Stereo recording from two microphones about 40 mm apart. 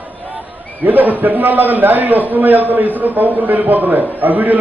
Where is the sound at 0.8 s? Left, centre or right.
Right.